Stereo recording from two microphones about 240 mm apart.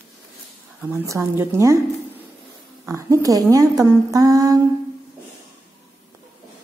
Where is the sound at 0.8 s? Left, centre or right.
Centre.